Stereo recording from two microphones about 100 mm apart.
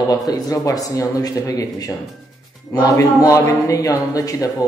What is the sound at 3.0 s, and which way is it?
Speech, 35° left (ahead or behind).